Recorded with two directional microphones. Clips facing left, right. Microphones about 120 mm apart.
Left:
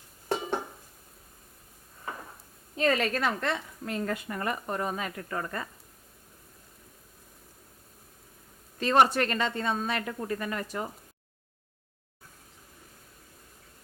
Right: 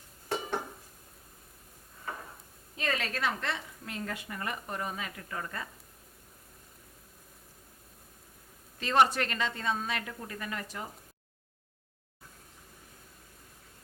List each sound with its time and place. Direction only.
2.7 s a woman's voice: 45° left (ahead or behind)
8.8 s a woman's voice: 50° left (ahead or behind)